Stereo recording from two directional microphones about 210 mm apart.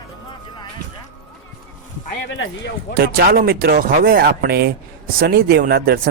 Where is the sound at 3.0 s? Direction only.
45° right (ahead or behind).